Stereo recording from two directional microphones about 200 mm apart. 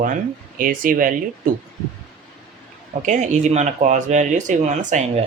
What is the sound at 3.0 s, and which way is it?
Speech, 35° right (ahead or behind).